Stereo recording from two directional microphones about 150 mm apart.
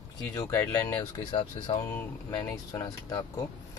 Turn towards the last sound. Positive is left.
turn(degrees=25)  # may be behind; listen again after turning